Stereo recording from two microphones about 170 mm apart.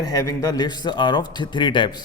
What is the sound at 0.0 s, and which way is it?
A man's voice, 20° left (ahead or behind).